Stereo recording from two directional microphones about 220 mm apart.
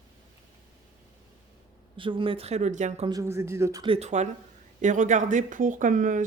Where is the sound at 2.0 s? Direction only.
25° right (ahead or behind).